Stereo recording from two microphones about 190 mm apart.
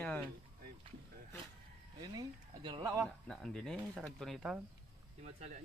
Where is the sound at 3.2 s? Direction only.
Centre (ahead or behind).